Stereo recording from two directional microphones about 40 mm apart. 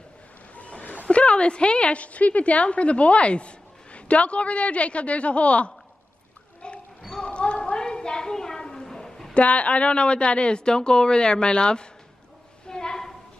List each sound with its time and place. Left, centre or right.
0.6 s a woman's voice: left
6.6 s basketball bounce: left
7.2 s basketball bounce: left
7.7 s a sound: left
9.3 s speech: left
12.6 s a sound: centre